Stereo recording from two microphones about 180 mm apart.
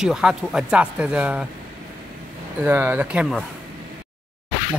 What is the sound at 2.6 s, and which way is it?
Speech, 10° right (ahead or behind).